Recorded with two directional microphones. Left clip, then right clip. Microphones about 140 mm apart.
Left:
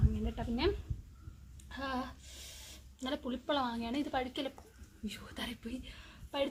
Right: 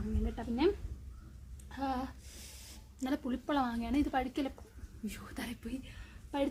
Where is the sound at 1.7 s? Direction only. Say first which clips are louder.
Right 2 dB; 10° right (ahead or behind).